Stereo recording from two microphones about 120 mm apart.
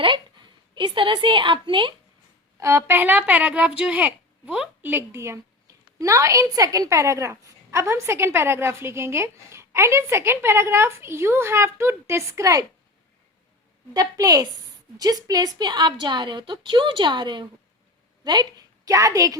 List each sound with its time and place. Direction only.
0.0 s a woman's voice: 40° right (ahead or behind)
2.6 s a woman's voice: 25° right (ahead or behind)
13.9 s a woman's voice: 30° right (ahead or behind)